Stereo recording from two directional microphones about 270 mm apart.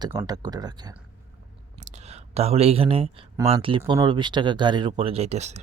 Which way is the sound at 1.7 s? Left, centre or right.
Right.